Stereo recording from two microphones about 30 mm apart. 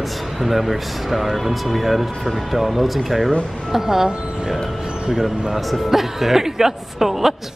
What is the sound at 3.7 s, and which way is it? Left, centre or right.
Speech, centre.